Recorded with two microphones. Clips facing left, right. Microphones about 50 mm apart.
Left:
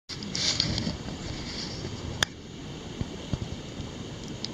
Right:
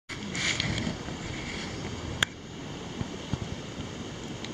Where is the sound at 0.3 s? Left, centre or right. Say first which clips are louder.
Right 2 dB; right.